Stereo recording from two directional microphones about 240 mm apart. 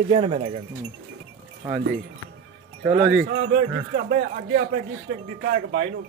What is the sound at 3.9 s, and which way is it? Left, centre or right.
Speech, right.